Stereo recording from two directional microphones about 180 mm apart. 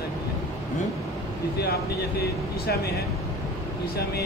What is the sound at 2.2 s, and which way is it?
Speech, 60° left (ahead or behind).